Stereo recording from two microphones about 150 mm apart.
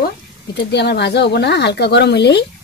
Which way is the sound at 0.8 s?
90° left.